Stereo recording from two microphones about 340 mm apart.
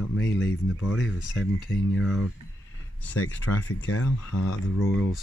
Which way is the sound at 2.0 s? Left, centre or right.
Centre.